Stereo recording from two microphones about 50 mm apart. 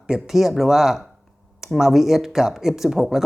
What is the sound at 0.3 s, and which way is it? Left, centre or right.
Speech, centre.